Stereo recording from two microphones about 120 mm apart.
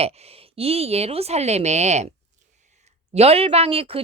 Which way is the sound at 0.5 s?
55° right (ahead or behind).